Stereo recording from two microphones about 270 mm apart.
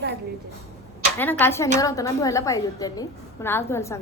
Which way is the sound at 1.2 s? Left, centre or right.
Centre.